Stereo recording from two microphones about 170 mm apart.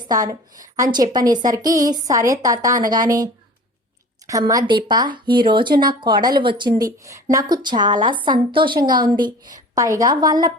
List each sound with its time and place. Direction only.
0.0 s a woman's voice: 20° right (ahead or behind)
4.3 s a woman's voice: 20° right (ahead or behind)